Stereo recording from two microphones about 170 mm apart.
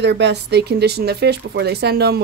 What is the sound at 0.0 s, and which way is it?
Speech, 90° right.